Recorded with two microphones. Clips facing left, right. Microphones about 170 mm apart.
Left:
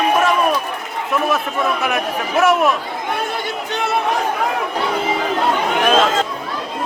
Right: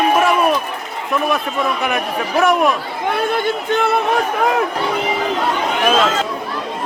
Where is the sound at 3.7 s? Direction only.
55° right (ahead or behind).